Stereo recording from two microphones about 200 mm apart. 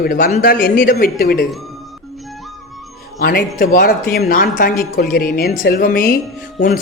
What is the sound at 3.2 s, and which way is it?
Speech, 45° left (ahead or behind).